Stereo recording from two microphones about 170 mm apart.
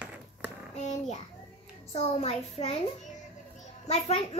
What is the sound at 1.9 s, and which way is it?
A child's voice, 35° left (ahead or behind).